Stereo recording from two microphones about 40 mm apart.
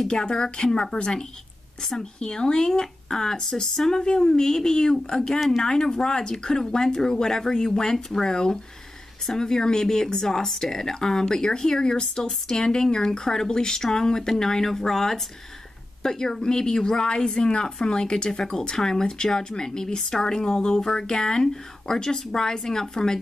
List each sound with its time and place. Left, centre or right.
0.0 s speech: centre
1.8 s speech: centre
2.1 s speech: left